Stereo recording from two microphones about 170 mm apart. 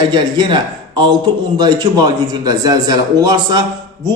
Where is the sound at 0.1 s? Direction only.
25° right (ahead or behind).